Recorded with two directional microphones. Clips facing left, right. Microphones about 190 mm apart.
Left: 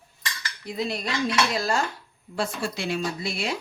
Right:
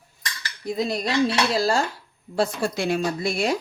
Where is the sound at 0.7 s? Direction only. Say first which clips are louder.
Right 4 dB; 40° right (ahead or behind).